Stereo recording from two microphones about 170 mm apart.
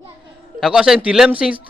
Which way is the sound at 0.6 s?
Centre (ahead or behind).